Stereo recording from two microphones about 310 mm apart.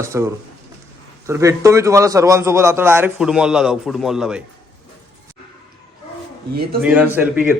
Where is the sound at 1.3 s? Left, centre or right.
Centre.